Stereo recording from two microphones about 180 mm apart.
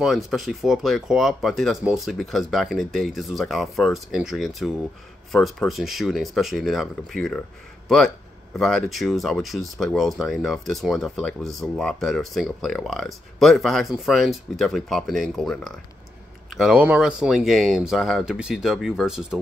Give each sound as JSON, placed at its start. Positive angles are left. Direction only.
{"t": 0.0, "sound": "speech", "side_deg": 0}
{"t": 8.5, "sound": "speech", "side_deg": 5}